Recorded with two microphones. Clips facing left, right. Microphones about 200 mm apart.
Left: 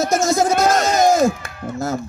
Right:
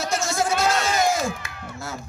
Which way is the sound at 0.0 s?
45° left (ahead or behind).